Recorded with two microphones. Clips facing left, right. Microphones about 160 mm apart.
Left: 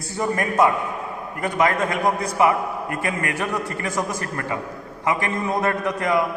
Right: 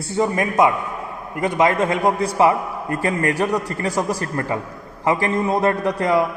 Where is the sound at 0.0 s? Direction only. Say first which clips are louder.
Right 4 dB; 20° right (ahead or behind).